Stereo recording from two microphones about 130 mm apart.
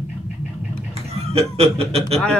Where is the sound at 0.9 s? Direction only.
50° right (ahead or behind).